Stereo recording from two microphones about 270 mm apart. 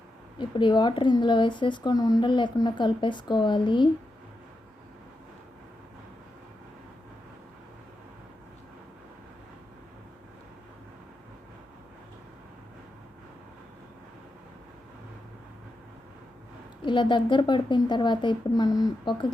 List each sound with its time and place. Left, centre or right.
0.3 s speech: centre
16.8 s speech: centre